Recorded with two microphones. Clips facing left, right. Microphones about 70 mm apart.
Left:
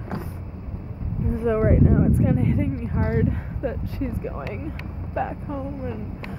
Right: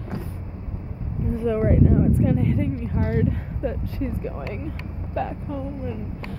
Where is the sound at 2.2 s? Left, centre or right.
Centre.